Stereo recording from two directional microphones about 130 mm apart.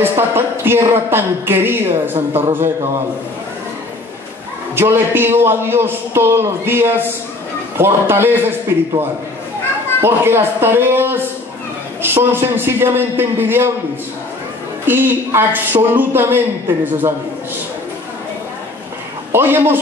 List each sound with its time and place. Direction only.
0.0 s speech: 15° right (ahead or behind)
4.7 s speech: 15° right (ahead or behind)
10.0 s speech: 20° right (ahead or behind)
14.9 s speech: 15° right (ahead or behind)
19.3 s speech: 15° right (ahead or behind)